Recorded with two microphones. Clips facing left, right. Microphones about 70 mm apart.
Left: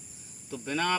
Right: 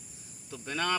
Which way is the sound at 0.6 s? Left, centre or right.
Centre.